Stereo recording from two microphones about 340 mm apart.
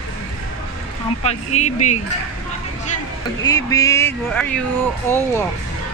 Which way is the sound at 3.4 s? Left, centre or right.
Centre.